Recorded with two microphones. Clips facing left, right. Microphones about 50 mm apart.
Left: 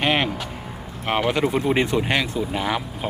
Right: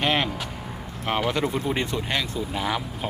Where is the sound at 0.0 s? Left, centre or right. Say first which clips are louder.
Left 2 dB; centre.